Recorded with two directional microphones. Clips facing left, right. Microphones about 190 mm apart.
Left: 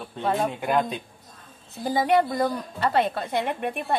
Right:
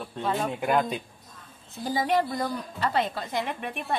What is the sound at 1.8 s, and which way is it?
A woman's voice, 60° left (ahead or behind).